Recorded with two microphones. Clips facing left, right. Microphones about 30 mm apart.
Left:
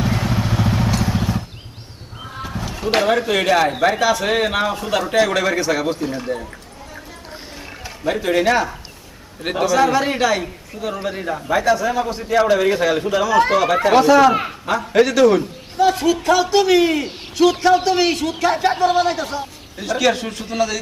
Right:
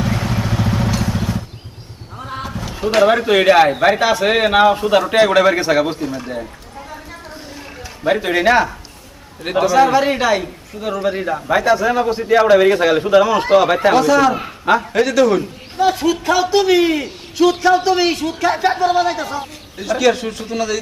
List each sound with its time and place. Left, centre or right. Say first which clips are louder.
0.0 s vehicle: right 1 dB; centre
2.5 s a sound: even; centre
3.1 s a man's voice: right 4 dB; centre
8.0 s a man's voice: right 3 dB; centre
13.1 s speech: right 7 dB; right
13.3 s a man's voice: right 2 dB; centre
13.9 s speech: left 5 dB; centre
14.6 s a man's voice: right 6 dB; right
14.9 s a man's voice: left 5 dB; centre